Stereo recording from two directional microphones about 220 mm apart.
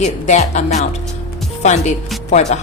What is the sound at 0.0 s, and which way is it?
A woman's voice, 30° left (ahead or behind).